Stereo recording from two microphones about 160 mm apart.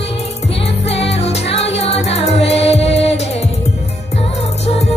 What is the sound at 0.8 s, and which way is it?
Music, 40° left (ahead or behind).